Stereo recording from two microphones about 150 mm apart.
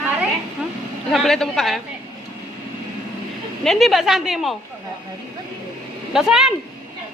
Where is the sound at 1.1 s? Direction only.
Centre (ahead or behind).